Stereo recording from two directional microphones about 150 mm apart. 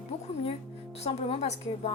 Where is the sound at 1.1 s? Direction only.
40° left (ahead or behind).